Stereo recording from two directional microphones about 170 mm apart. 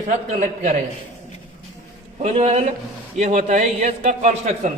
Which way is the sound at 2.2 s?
40° right (ahead or behind).